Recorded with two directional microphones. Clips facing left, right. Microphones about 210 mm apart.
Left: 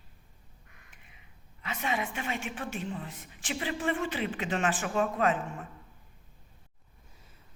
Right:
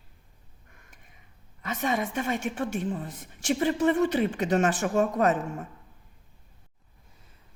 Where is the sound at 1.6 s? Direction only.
45° right (ahead or behind).